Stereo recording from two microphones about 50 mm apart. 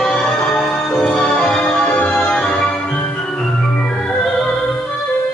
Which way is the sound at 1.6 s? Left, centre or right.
Left.